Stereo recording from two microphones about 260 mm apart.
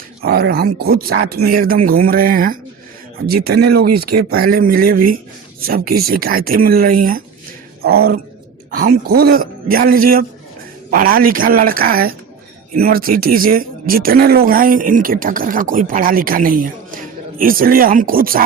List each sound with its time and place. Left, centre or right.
0.2 s speech: right